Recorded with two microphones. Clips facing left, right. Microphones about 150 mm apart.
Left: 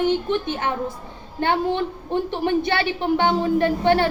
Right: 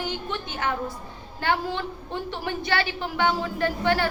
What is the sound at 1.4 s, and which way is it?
A woman's voice, 20° left (ahead or behind).